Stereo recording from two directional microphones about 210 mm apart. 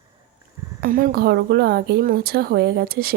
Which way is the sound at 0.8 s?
40° right (ahead or behind).